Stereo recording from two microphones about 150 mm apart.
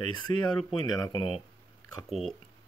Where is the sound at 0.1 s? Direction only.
30° left (ahead or behind).